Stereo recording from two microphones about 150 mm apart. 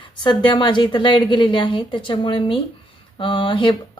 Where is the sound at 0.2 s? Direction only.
30° left (ahead or behind).